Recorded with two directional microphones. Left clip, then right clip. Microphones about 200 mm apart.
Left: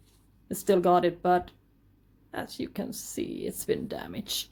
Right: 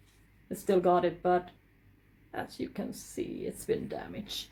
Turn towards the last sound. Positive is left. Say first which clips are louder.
# left 5 dB
turn(degrees=40)  # may be behind; listen again after turning